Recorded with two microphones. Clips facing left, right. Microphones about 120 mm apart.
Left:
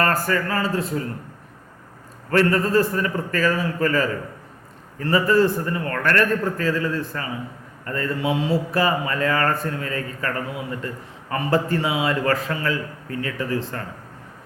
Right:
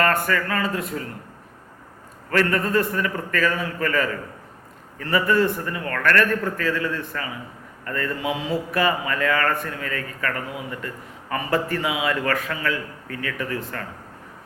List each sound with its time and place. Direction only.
0.0 s a man's voice: 30° left (ahead or behind)
2.3 s a man's voice: 30° left (ahead or behind)